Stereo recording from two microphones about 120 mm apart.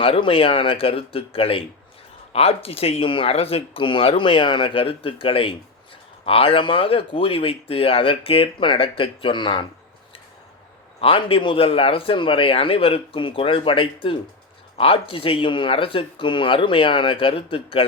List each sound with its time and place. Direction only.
0.0 s speech: 50° left (ahead or behind)
11.0 s speech: 50° left (ahead or behind)